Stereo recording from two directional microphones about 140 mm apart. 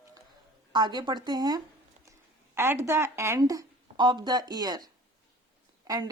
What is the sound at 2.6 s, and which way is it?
Speech, 15° right (ahead or behind).